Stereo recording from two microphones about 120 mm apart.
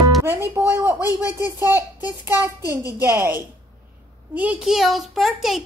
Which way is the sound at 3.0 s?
15° right (ahead or behind).